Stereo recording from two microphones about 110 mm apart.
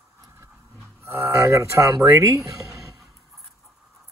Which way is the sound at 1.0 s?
25° right (ahead or behind).